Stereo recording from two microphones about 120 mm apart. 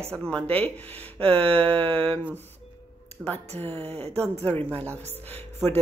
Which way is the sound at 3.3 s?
15° left (ahead or behind).